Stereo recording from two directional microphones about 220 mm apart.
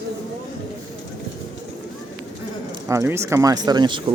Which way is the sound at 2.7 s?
15° right (ahead or behind).